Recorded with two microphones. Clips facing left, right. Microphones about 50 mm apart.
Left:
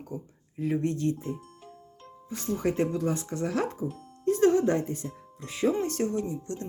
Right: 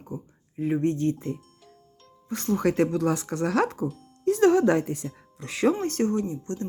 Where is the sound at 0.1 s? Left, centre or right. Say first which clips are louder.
Right 3 dB; right.